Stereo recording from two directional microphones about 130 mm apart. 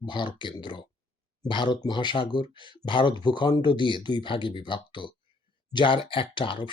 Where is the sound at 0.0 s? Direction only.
35° left (ahead or behind).